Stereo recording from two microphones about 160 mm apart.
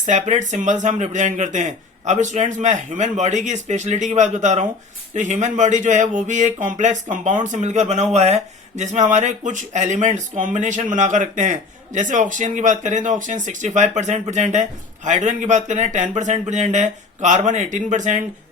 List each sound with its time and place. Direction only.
0.0 s speech: 50° right (ahead or behind)